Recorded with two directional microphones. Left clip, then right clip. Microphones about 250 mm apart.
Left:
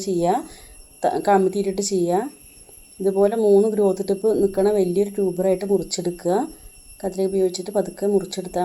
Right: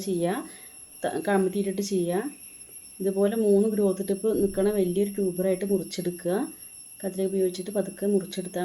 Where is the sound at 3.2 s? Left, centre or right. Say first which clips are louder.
Left 6 dB; centre.